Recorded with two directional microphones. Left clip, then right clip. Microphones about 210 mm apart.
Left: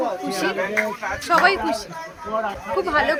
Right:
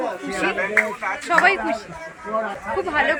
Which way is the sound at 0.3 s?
20° left (ahead or behind).